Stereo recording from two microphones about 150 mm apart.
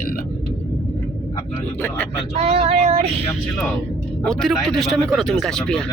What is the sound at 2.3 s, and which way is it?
Child singing, 45° right (ahead or behind).